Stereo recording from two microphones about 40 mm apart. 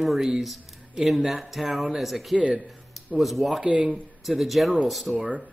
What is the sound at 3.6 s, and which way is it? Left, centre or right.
Speech, right.